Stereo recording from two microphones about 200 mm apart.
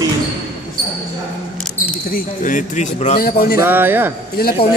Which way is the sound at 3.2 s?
50° left (ahead or behind).